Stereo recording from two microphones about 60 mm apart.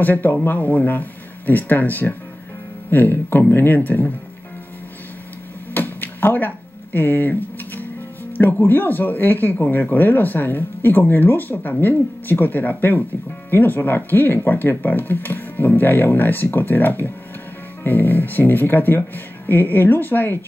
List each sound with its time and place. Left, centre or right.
0.0 s speech: left
5.8 s a sound: left
8.4 s speech: left